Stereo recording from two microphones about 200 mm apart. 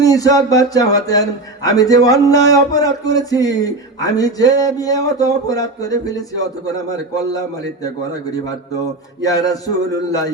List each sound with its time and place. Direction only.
0.0 s speech: 15° left (ahead or behind)
9.2 s speech: 20° left (ahead or behind)